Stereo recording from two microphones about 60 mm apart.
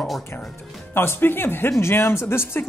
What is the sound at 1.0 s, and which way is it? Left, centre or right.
Speech, left.